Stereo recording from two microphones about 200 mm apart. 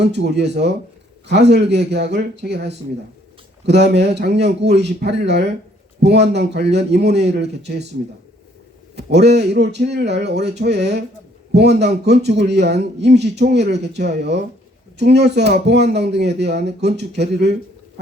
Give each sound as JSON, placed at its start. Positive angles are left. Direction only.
{"t": 0.0, "sound": "a man's voice", "side_deg": -60}
{"t": 9.0, "sound": "a man's voice", "side_deg": -55}